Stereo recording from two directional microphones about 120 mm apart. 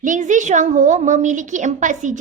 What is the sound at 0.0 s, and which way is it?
A woman's voice, 90° right.